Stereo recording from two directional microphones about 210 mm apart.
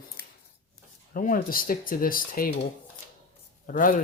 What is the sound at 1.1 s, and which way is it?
Speech, 40° left (ahead or behind).